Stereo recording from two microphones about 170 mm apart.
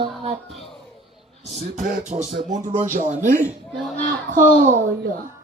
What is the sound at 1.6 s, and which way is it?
Speech, 50° right (ahead or behind).